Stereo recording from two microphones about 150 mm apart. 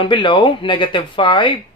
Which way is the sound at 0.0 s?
30° left (ahead or behind).